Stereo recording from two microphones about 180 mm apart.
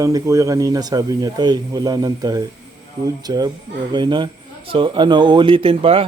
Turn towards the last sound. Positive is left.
turn(degrees=-30)  # may be behind; listen again after turning